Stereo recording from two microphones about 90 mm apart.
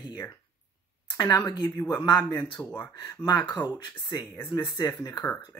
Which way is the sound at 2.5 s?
15° left (ahead or behind).